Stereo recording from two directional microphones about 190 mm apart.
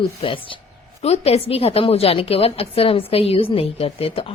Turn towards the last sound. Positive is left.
turn(degrees=30)  # may be behind; listen again after turning